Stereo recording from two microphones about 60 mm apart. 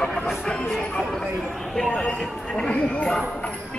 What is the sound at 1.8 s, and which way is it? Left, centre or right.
Speech, centre.